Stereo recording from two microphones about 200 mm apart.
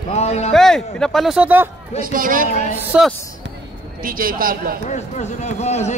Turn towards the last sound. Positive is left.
turn(degrees=35)  # may be behind; listen again after turning